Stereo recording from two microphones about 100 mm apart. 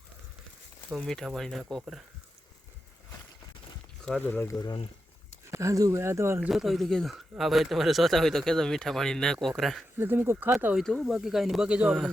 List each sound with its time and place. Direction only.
0.9 s speech: centre (ahead or behind)
4.0 s speech: 10° left (ahead or behind)
4.4 s speech: 30° left (ahead or behind)
5.5 s speech: 30° right (ahead or behind)
6.5 s speech: centre (ahead or behind)
10.0 s speech: 20° right (ahead or behind)
10.8 s speech: 5° left (ahead or behind); by 11.9 s 10° right (ahead or behind)